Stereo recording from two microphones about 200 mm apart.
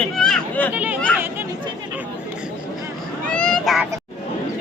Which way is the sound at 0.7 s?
10° right (ahead or behind).